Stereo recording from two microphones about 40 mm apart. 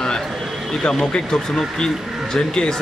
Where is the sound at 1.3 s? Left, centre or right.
Centre.